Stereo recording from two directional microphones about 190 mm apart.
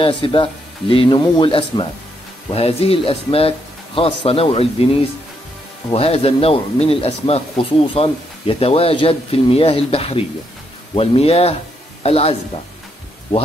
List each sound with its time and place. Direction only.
0.0 s speech: 25° left (ahead or behind)
5.9 s speech: 30° left (ahead or behind)